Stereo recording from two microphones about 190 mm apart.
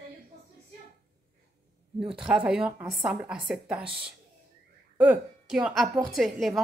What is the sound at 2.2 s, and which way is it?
A woman's voice, 5° right (ahead or behind).